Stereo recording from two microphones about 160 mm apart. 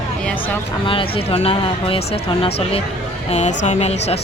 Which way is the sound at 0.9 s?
35° left (ahead or behind).